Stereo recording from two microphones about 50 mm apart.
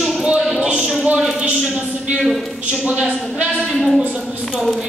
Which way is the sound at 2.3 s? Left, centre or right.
Centre.